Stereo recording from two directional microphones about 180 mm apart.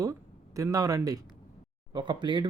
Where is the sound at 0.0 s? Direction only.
20° right (ahead or behind).